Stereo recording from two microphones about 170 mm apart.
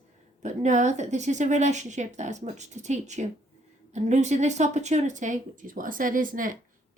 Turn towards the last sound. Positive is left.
turn(degrees=-55)  # may be behind; listen again after turning